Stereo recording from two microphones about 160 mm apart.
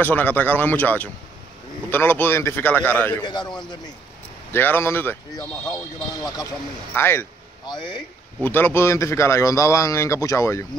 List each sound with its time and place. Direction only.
0.0 s speech: 10° left (ahead or behind)
3.2 s speech: 30° left (ahead or behind)
4.5 s speech: 15° left (ahead or behind)
6.9 s speech: 15° left (ahead or behind)
7.6 s speech: 30° left (ahead or behind)
8.4 s speech: 15° left (ahead or behind)